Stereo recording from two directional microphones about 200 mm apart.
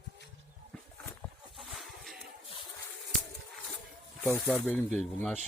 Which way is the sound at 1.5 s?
Centre (ahead or behind).